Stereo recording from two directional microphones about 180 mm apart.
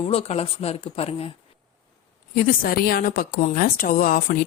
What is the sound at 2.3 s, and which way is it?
A woman's voice, 55° left (ahead or behind).